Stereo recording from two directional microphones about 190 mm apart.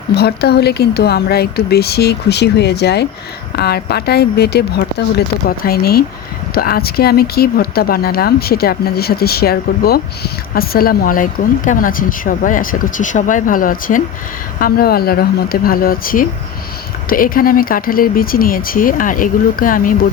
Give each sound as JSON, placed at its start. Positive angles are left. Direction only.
{"t": 0.1, "sound": "speech", "side_deg": 60}